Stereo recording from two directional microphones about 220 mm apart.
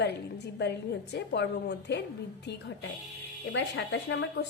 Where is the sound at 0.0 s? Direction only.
50° left (ahead or behind).